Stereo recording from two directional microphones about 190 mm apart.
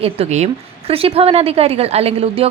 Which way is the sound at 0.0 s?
30° right (ahead or behind).